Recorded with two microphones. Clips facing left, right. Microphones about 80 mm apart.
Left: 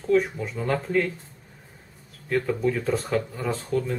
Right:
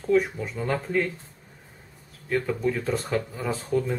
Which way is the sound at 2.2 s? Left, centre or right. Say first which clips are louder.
Left 1 dB; centre.